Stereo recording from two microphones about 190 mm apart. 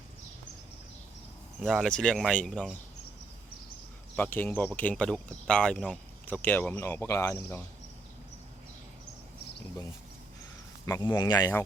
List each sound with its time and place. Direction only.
1.6 s speech: centre (ahead or behind)
4.1 s speech: 10° left (ahead or behind)
10.8 s speech: 20° left (ahead or behind)